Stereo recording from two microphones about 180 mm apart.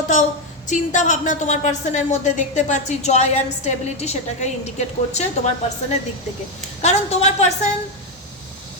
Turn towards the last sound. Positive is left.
turn(degrees=40)  # may be behind; listen again after turning